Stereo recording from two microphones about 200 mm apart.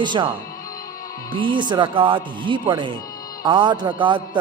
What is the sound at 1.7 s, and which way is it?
A man's voice, 25° right (ahead or behind).